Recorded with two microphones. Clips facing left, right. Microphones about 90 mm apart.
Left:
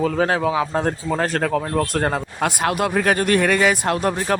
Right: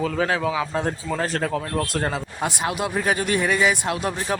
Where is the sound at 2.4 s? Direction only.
55° left (ahead or behind).